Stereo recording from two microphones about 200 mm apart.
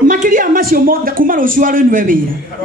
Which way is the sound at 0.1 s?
40° right (ahead or behind).